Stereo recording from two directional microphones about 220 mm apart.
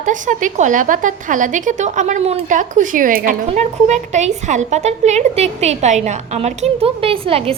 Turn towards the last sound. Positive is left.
turn(degrees=-25)  # may be behind; listen again after turning